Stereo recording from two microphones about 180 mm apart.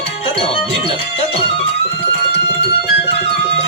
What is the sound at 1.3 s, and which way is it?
Music, 35° left (ahead or behind).